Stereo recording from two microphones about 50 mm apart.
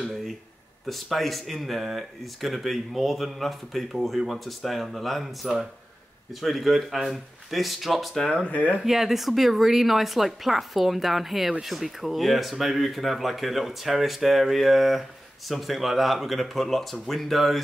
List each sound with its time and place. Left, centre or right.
0.0 s a sound: centre
0.8 s speech: centre
8.3 s speech: left
8.7 s speech: centre